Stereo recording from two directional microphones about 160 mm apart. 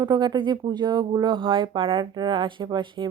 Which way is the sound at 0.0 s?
25° right (ahead or behind).